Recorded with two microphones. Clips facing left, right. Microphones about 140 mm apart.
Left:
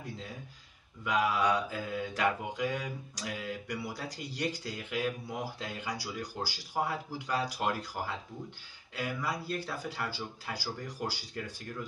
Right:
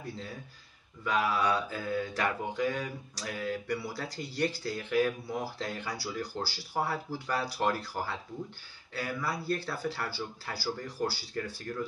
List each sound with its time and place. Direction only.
1.0 s mantra: 15° left (ahead or behind)